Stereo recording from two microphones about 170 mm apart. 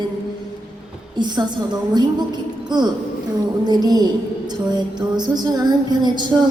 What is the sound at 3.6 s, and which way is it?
Music, 25° right (ahead or behind).